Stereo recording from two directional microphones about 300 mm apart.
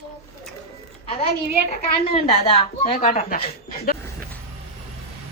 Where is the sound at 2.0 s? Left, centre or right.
Centre.